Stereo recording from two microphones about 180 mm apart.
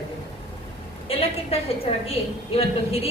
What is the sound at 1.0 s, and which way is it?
A woman's voice, 30° left (ahead or behind).